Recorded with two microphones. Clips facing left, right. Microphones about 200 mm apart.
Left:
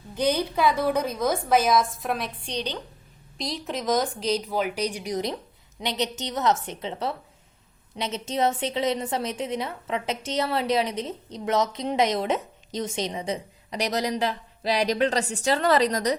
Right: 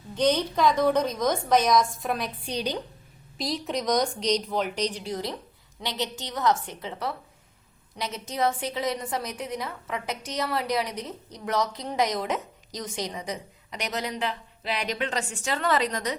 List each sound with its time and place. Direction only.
0.2 s a woman's voice: 10° left (ahead or behind); by 16.1 s 40° left (ahead or behind)